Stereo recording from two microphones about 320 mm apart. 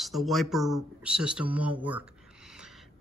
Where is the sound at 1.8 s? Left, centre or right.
Centre.